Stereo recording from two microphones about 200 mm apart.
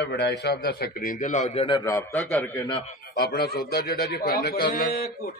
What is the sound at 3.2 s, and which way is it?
A man's voice, 55° left (ahead or behind).